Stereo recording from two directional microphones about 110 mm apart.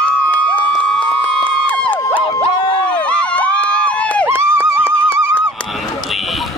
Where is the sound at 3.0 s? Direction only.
10° left (ahead or behind).